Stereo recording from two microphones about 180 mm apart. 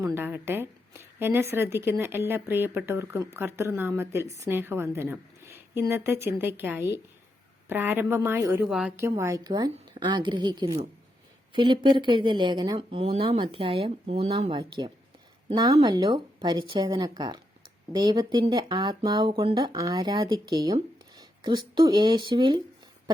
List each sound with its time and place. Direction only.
0.0 s speech: 15° right (ahead or behind)
8.6 s a woman's voice: 5° right (ahead or behind)
9.0 s speech: 15° right (ahead or behind)